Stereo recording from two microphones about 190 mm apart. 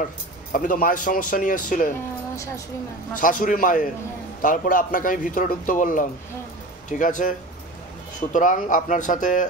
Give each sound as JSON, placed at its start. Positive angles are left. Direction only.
{"t": 0.5, "sound": "a man's voice", "side_deg": 45}
{"t": 3.2, "sound": "a man's voice", "side_deg": 45}